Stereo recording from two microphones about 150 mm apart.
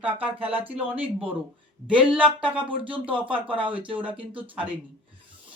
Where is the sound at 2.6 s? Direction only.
35° right (ahead or behind).